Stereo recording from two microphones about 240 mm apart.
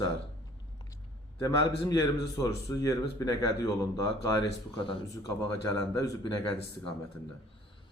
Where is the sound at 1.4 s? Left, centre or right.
Centre.